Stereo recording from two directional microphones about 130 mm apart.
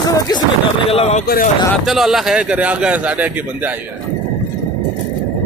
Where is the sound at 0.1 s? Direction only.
35° left (ahead or behind).